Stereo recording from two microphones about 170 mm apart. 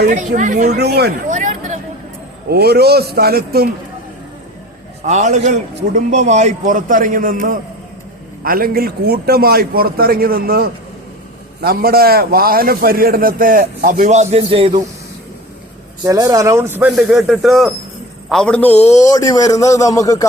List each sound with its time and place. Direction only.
0.1 s a man's voice: 50° right (ahead or behind)
0.8 s a man's voice: 70° right (ahead or behind)
1.3 s a sound: 45° right (ahead or behind)
2.5 s a man's voice: 70° right (ahead or behind)
5.0 s a man's voice: 45° right (ahead or behind)
16.0 s a man's voice: 20° right (ahead or behind); by 20.2 s 20° left (ahead or behind)